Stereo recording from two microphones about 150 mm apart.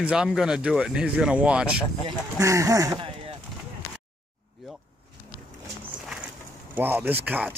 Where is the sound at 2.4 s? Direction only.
20° right (ahead or behind).